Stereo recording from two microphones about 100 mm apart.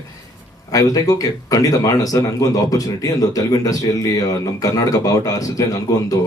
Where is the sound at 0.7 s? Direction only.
35° left (ahead or behind).